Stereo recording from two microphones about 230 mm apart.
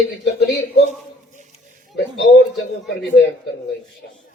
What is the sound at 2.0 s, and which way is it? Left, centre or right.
Speech, left.